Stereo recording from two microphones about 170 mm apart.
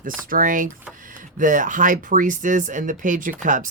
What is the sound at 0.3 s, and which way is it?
Speech, 55° right (ahead or behind).